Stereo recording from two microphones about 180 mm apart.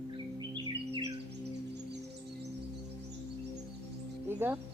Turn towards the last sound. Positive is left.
turn(degrees=-10)  # may be behind; listen again after turning